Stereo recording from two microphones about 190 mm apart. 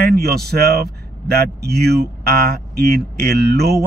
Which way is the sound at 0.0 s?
55° right (ahead or behind).